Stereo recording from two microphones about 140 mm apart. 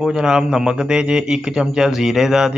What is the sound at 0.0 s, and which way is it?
A man's voice, 5° right (ahead or behind).